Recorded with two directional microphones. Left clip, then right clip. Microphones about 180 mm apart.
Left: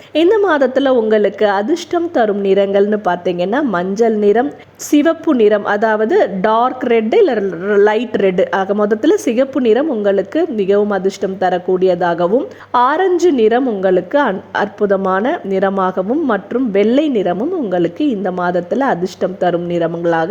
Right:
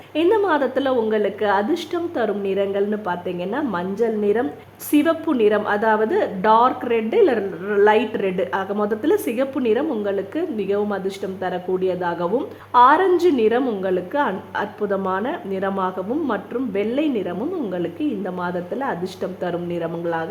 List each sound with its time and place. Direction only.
0.1 s a woman's voice: 30° left (ahead or behind)